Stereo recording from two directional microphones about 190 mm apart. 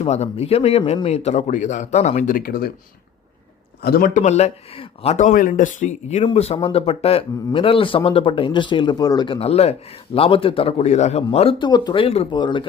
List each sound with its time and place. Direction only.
0.0 s speech: 35° left (ahead or behind); by 2.7 s 50° left (ahead or behind)
3.8 s speech: 55° left (ahead or behind); by 12.6 s 25° left (ahead or behind)